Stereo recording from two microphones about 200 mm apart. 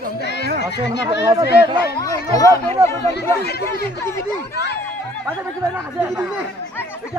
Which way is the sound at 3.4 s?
55° left (ahead or behind).